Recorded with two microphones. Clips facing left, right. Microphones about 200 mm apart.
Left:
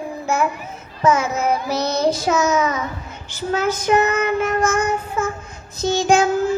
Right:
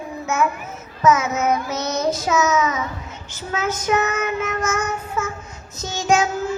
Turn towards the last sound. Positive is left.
turn(degrees=30)  # may be behind; listen again after turning